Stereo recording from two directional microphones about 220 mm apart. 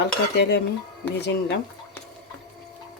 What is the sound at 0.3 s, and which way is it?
Speech, 50° left (ahead or behind).